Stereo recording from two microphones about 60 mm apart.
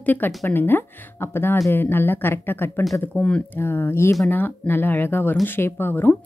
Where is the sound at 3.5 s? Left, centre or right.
Left.